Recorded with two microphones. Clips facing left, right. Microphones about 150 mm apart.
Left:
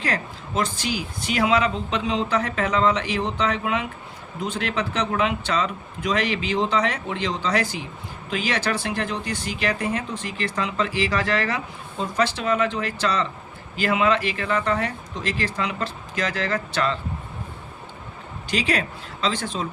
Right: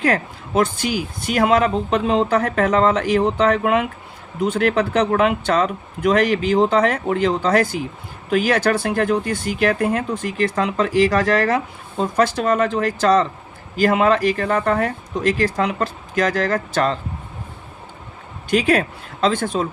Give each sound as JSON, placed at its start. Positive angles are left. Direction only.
{"t": 0.0, "sound": "speech", "side_deg": -55}
{"t": 18.5, "sound": "speech", "side_deg": -50}